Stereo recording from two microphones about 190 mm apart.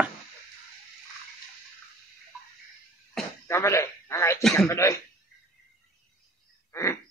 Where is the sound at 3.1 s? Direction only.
10° left (ahead or behind).